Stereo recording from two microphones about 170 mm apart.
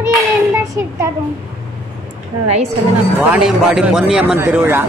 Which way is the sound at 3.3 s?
5° right (ahead or behind).